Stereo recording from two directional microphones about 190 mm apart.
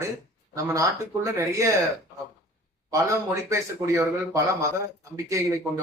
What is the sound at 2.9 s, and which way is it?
A man's voice, 15° right (ahead or behind).